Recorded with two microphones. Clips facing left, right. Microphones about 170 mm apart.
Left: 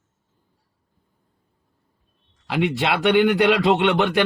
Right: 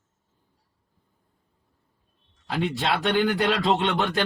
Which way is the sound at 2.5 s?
75° left (ahead or behind).